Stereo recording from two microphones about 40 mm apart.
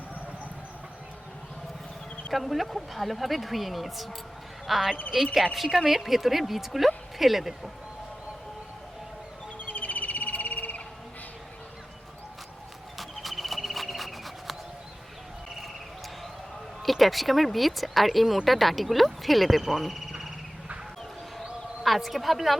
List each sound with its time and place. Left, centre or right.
2.3 s speech: centre
9.6 s bird: left
13.0 s horse: centre
16.8 s speech: centre
21.8 s speech: centre